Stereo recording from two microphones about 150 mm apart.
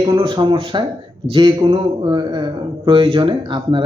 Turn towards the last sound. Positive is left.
turn(degrees=-35)  # may be behind; listen again after turning